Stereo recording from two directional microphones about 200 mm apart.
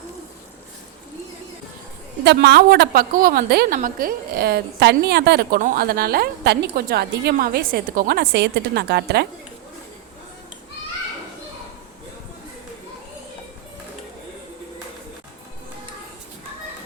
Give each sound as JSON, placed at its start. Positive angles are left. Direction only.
{"t": 2.2, "sound": "a woman's voice", "side_deg": -55}